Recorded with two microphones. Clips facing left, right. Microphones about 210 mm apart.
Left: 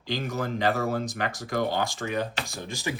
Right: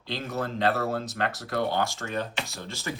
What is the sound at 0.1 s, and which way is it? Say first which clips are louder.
Speech: left 2 dB; 15° left (ahead or behind).